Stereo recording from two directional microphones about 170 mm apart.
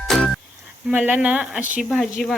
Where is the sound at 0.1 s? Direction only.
5° left (ahead or behind).